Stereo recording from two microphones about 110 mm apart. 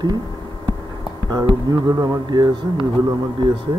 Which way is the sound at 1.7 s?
35° right (ahead or behind).